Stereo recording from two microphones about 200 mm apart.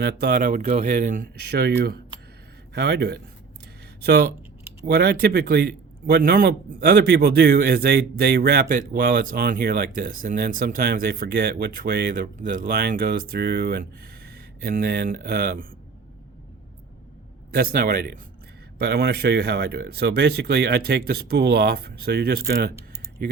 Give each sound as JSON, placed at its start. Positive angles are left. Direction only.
{"t": 0.0, "sound": "speech", "side_deg": -50}
{"t": 17.5, "sound": "speech", "side_deg": -50}